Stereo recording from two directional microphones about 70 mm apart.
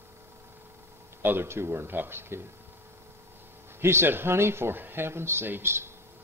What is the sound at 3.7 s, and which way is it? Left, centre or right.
Speech, right.